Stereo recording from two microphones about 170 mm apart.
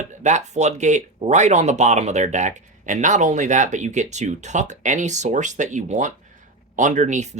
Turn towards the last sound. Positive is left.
turn(degrees=-45)  # may be behind; listen again after turning